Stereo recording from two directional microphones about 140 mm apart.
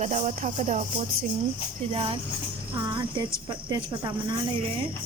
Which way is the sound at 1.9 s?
40° right (ahead or behind).